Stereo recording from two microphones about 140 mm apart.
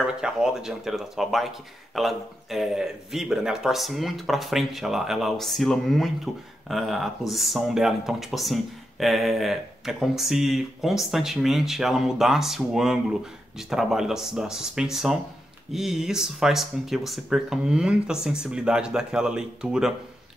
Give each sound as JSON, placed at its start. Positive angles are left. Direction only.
{"t": 0.0, "sound": "speech", "side_deg": -5}